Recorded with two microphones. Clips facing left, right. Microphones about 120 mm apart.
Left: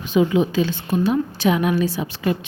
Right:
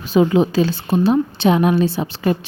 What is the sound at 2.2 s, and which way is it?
Speech, 40° right (ahead or behind).